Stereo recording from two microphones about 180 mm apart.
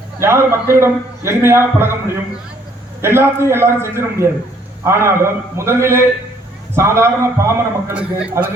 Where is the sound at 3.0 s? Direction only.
15° right (ahead or behind).